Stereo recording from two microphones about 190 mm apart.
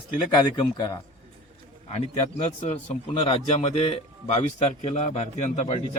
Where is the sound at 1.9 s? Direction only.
35° left (ahead or behind).